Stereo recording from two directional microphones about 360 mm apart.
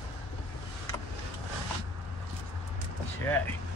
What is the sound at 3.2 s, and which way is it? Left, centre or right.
Vehicle, centre.